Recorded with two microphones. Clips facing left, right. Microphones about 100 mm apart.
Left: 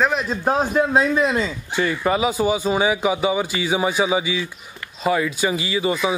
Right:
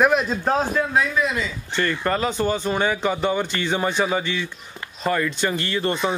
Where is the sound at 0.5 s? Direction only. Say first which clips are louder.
Left 4 dB; 20° left (ahead or behind).